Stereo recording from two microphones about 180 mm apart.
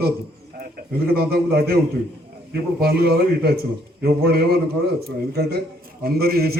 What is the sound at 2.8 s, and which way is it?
A man's voice, 60° right (ahead or behind).